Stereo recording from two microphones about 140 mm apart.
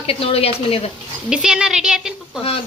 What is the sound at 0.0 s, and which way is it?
Speech, 45° left (ahead or behind).